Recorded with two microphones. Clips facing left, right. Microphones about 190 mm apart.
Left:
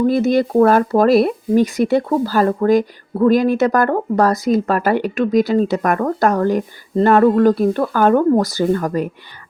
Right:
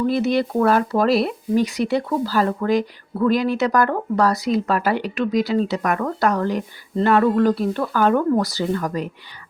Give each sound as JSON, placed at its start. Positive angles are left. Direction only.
{"t": 0.0, "sound": "speech", "side_deg": 45}